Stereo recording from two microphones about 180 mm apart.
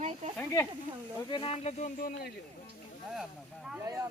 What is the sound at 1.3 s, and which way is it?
Speech, 30° left (ahead or behind).